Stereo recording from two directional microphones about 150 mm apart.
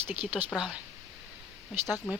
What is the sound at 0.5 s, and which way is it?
Speech, 5° right (ahead or behind).